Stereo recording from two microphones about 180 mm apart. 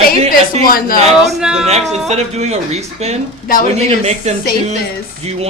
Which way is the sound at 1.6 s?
35° right (ahead or behind).